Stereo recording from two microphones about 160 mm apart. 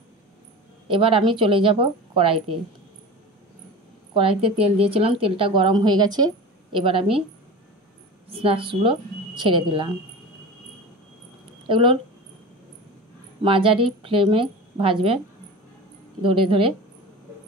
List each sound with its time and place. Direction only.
0.8 s a woman's voice: 30° right (ahead or behind)
4.1 s a woman's voice: 35° right (ahead or behind)
8.3 s a woman's voice: 35° right (ahead or behind)
11.6 s speech: 30° right (ahead or behind)
13.4 s a woman's voice: 35° right (ahead or behind)
16.2 s a woman's voice: 30° right (ahead or behind)